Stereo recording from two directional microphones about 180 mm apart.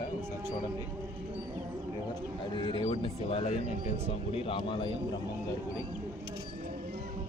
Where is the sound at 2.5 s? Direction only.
25° left (ahead or behind).